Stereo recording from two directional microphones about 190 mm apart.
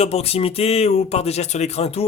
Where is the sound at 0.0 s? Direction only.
30° left (ahead or behind).